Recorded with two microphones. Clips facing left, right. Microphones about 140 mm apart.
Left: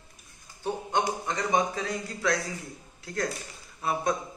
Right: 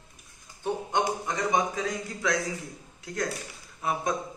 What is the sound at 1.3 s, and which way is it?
A man's voice, 15° right (ahead or behind).